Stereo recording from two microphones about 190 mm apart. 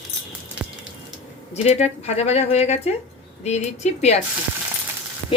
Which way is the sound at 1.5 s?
35° left (ahead or behind).